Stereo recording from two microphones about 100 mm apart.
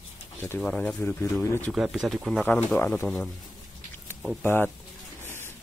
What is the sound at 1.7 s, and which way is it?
Speech, 5° right (ahead or behind).